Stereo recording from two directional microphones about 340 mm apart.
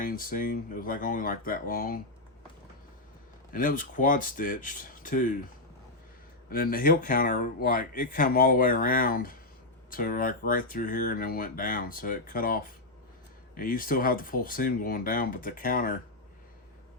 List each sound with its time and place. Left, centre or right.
0.0 s speech: left
3.5 s speech: left
6.5 s speech: left